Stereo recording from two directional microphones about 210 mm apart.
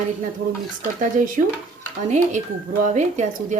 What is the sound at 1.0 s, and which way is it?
Speech, 40° right (ahead or behind).